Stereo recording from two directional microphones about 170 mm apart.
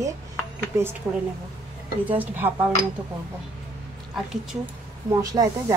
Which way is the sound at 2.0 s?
10° right (ahead or behind).